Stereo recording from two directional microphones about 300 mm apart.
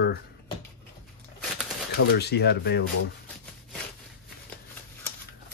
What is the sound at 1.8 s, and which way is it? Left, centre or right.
Speech, left.